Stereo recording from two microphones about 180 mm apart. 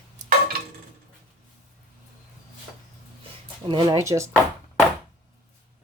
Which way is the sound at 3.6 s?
20° right (ahead or behind).